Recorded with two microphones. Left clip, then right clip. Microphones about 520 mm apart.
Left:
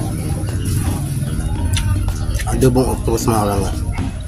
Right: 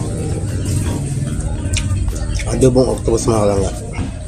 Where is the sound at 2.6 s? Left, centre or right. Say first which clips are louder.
Right 3 dB; left.